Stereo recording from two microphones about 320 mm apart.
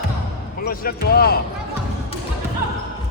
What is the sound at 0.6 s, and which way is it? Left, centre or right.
Speech, left.